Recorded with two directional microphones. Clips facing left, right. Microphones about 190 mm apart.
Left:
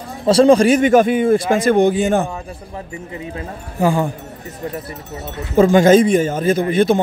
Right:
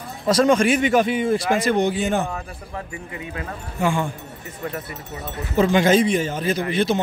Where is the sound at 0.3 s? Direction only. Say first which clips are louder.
Left 6 dB; 30° left (ahead or behind); by 2.2 s 50° left (ahead or behind).